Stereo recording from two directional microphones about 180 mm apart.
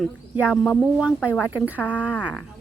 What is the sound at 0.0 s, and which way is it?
Speech, 5° right (ahead or behind).